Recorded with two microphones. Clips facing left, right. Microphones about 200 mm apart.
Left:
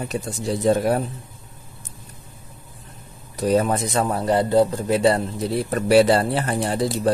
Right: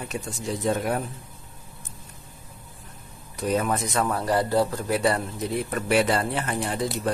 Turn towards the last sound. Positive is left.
turn(degrees=35)  # may be behind; listen again after turning